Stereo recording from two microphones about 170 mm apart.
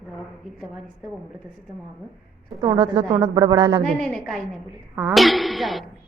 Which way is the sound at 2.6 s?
25° right (ahead or behind).